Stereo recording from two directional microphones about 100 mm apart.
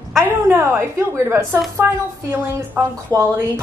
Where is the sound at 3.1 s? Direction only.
25° right (ahead or behind).